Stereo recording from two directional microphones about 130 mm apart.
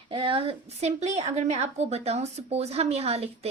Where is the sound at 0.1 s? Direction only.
45° right (ahead or behind).